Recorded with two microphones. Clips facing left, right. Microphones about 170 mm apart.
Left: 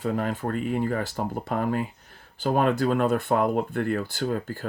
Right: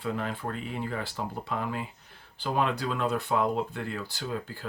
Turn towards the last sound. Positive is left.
turn(degrees=45)  # may be behind; listen again after turning